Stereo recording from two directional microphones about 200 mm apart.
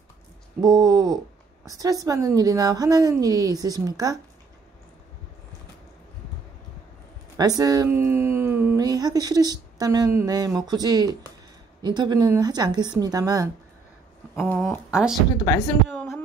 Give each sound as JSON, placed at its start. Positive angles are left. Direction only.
{"t": 0.6, "sound": "a woman's voice", "side_deg": -20}
{"t": 7.3, "sound": "a woman's voice", "side_deg": -20}
{"t": 14.3, "sound": "a sound", "side_deg": 10}
{"t": 14.9, "sound": "speech", "side_deg": 0}
{"t": 15.4, "sound": "speech", "side_deg": 15}